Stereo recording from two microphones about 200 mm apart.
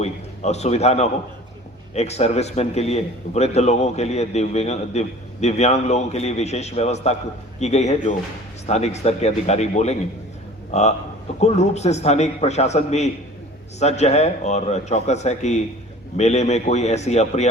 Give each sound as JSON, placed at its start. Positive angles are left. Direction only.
{"t": 0.0, "sound": "a man's voice", "side_deg": 35}